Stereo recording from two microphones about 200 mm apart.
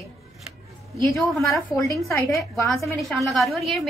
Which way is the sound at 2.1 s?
15° left (ahead or behind).